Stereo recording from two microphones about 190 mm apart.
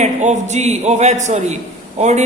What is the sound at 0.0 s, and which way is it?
A man's voice, 35° right (ahead or behind).